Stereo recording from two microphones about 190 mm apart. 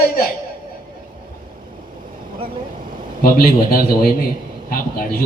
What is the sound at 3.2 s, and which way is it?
A man's voice, 50° left (ahead or behind).